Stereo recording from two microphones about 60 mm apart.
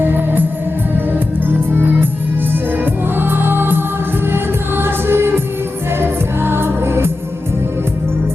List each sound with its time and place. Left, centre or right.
0.0 s music: right
2.5 s music: right
4.8 s music: right